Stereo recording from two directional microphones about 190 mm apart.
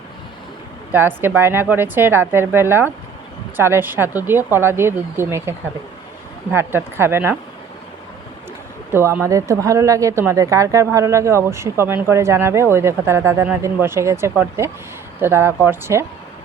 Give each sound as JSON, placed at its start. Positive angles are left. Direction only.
{"t": 0.9, "sound": "speech", "side_deg": -10}
{"t": 8.9, "sound": "speech", "side_deg": -10}